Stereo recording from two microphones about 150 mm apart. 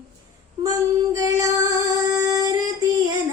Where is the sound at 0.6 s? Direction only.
25° right (ahead or behind).